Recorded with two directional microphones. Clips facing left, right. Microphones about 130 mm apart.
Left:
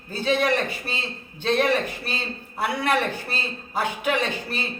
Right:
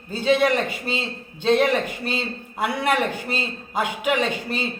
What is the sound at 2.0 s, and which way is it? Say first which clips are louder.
A man's voice: right 4 dB; 20° right (ahead or behind).